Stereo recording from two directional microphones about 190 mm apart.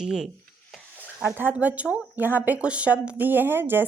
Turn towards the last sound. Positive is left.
turn(degrees=-10)  # may be behind; listen again after turning